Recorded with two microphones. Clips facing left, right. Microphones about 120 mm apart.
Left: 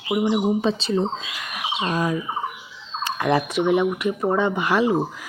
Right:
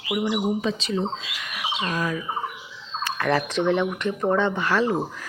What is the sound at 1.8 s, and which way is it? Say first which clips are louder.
Speech: left 4 dB; 25° left (ahead or behind).